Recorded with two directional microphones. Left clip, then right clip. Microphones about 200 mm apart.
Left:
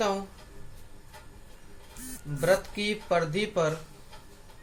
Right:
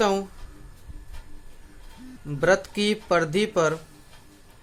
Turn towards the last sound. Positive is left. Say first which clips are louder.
# right 5 dB
turn(degrees=-50)  # may be behind; listen again after turning